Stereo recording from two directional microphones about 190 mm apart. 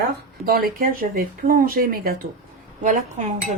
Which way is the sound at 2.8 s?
40° right (ahead or behind).